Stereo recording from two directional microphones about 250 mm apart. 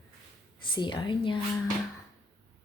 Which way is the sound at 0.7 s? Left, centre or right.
Centre.